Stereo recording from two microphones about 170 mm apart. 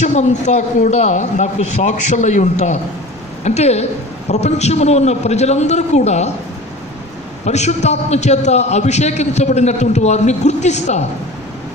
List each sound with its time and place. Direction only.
0.0 s a man's voice: 40° left (ahead or behind)
7.4 s a man's voice: 40° left (ahead or behind)